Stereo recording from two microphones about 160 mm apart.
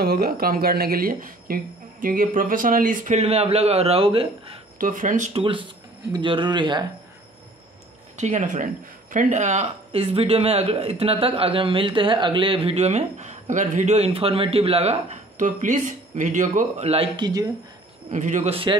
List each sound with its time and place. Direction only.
0.0 s speech: 75° right (ahead or behind); by 4.6 s 35° right (ahead or behind)
4.7 s speech: 55° right (ahead or behind)
5.3 s speech: 35° right (ahead or behind)
8.2 s speech: 50° right (ahead or behind)
15.3 s speech: 50° right (ahead or behind); by 17.3 s 35° right (ahead or behind)
18.1 s speech: 50° right (ahead or behind)
18.5 s speech: 35° right (ahead or behind)